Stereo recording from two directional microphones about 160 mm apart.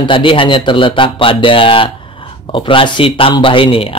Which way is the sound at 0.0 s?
30° left (ahead or behind).